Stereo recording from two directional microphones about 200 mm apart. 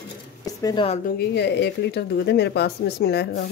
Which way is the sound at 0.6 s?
25° left (ahead or behind).